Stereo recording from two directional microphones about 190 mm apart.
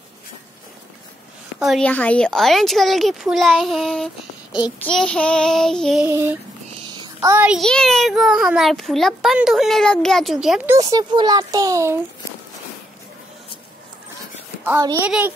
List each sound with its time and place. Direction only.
1.6 s a child's voice: 5° left (ahead or behind)
6.0 s a child's voice: 15° right (ahead or behind)
7.4 s a child's voice: centre (ahead or behind)
10.9 s a child's voice: 20° right (ahead or behind)
14.8 s a child's voice: 20° right (ahead or behind)
15.0 s a child's voice: 5° right (ahead or behind)